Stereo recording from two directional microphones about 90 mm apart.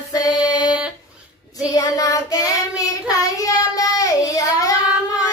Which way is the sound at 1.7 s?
40° left (ahead or behind).